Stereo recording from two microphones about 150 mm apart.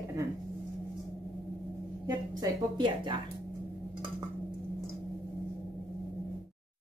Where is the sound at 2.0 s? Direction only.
25° right (ahead or behind).